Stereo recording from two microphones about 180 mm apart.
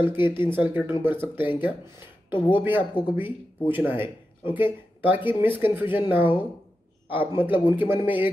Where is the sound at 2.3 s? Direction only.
25° left (ahead or behind).